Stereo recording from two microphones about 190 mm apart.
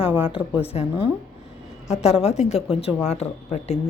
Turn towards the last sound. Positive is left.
turn(degrees=35)  # may be behind; listen again after turning